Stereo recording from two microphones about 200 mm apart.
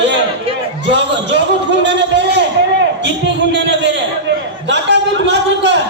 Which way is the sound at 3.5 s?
60° right (ahead or behind).